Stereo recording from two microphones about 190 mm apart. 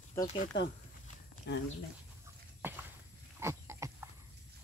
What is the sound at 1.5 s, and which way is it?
Speech, 65° left (ahead or behind).